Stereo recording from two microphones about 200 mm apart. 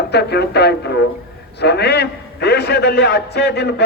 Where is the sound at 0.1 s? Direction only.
55° left (ahead or behind).